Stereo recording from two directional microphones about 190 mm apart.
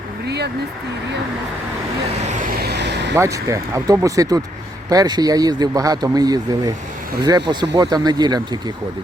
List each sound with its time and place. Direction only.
0.3 s speech: 60° right (ahead or behind)
2.6 s vehicle: 60° right (ahead or behind)
3.2 s speech: 15° right (ahead or behind)